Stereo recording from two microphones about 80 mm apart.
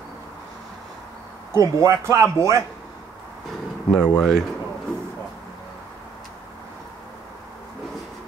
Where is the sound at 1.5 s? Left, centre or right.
Right.